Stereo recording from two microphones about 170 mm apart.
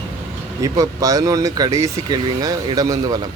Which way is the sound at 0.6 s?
20° right (ahead or behind).